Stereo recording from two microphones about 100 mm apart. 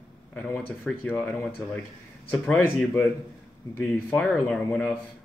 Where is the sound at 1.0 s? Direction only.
20° left (ahead or behind).